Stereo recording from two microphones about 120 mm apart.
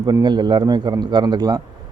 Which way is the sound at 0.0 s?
35° right (ahead or behind).